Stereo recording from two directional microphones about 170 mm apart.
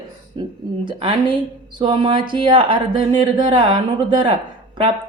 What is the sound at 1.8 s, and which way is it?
A woman's voice, 30° right (ahead or behind).